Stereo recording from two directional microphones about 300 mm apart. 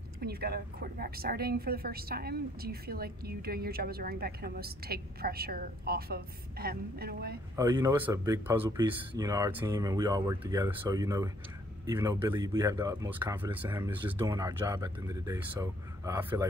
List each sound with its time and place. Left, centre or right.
0.2 s a woman's voice: right
7.5 s speech: centre